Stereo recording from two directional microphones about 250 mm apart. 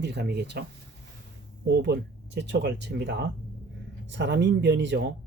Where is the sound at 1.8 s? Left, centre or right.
Right.